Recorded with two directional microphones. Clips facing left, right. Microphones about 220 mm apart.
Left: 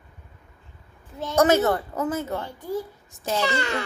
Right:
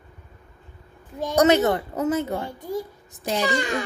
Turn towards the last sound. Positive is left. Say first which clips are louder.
# right 1 dB
turn(degrees=-15)  # may be behind; listen again after turning